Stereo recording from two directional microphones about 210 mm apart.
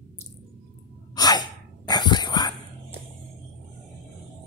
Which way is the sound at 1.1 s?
20° left (ahead or behind).